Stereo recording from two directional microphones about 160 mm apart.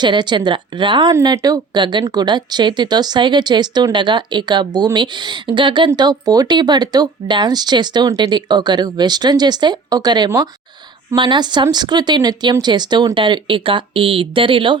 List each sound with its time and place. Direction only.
0.0 s speech: 30° right (ahead or behind)